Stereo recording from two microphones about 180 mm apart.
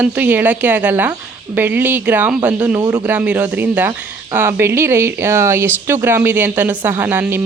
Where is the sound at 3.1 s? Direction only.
10° right (ahead or behind).